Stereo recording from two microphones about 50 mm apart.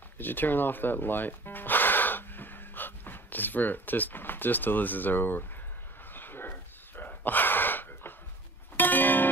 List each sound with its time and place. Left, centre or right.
0.2 s speech: left
6.1 s a sound: left
8.7 s music: left